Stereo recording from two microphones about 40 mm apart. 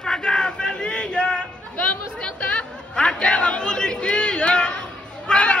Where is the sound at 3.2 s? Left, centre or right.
Left.